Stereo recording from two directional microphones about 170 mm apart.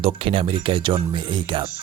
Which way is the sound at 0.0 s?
35° right (ahead or behind).